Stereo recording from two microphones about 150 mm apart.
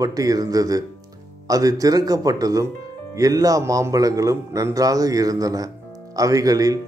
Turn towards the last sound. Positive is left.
turn(degrees=-25)  # may be behind; listen again after turning